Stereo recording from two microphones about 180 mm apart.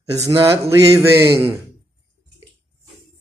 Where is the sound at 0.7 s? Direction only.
15° right (ahead or behind).